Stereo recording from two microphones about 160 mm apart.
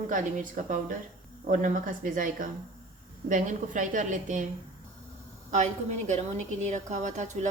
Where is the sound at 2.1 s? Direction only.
55° right (ahead or behind).